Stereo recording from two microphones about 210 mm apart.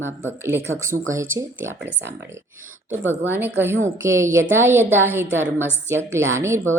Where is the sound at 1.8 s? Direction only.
55° right (ahead or behind).